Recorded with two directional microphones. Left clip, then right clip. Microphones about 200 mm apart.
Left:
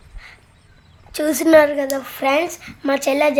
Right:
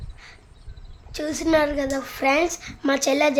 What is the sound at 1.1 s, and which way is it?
Speech, 30° left (ahead or behind).